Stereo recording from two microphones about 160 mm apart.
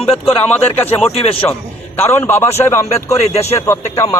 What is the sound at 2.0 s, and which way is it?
A man's voice, 15° left (ahead or behind).